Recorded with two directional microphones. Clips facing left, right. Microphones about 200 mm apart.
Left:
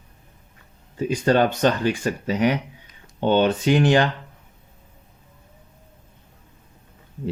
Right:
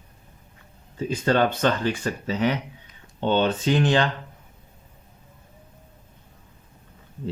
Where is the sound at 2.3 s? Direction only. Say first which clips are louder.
Left 3 dB; 15° left (ahead or behind).